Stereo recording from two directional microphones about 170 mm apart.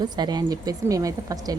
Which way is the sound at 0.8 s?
20° right (ahead or behind).